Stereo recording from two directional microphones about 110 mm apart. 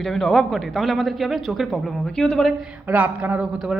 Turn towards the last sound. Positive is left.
turn(degrees=-5)  # may be behind; listen again after turning